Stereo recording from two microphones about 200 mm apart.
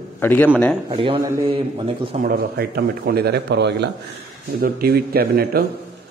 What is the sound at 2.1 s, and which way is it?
A man's voice, 50° right (ahead or behind).